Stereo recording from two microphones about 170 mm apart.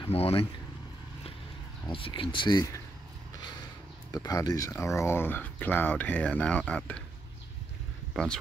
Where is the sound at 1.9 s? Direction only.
30° left (ahead or behind).